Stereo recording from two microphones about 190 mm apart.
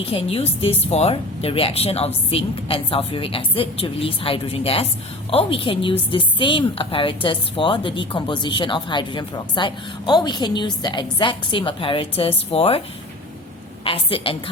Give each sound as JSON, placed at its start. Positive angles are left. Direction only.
{"t": 0.0, "sound": "a woman's voice", "side_deg": 30}
{"t": 13.8, "sound": "a woman's voice", "side_deg": 30}